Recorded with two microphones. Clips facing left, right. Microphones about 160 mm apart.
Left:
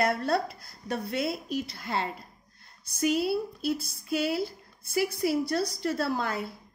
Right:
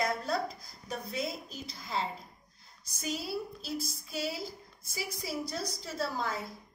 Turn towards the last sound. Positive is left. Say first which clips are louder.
# left 5 dB
turn(degrees=65)  # may be behind; listen again after turning